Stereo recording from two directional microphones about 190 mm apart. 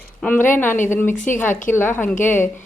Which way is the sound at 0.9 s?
10° left (ahead or behind).